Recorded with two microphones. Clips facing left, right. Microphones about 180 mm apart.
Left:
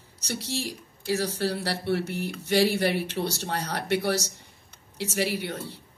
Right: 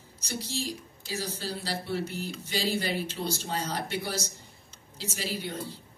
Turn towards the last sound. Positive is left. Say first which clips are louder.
# left 3 dB
turn(degrees=70)  # may be behind; listen again after turning